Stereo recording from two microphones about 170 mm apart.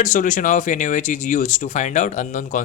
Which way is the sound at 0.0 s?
50° left (ahead or behind).